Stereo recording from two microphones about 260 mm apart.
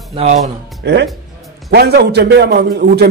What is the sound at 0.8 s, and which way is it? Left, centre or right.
A man's voice, right.